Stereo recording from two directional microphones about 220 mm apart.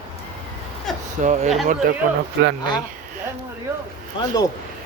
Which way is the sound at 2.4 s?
55° right (ahead or behind).